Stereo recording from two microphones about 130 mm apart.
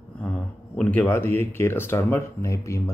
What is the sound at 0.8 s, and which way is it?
Speech, 10° left (ahead or behind).